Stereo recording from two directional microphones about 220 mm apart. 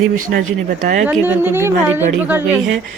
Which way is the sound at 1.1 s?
10° right (ahead or behind).